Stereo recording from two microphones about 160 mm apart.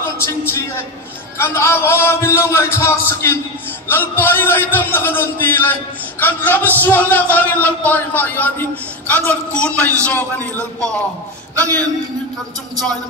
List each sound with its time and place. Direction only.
0.2 s a sound: 15° left (ahead or behind)
1.4 s a man's voice: 15° left (ahead or behind)
11.5 s speech: 10° left (ahead or behind)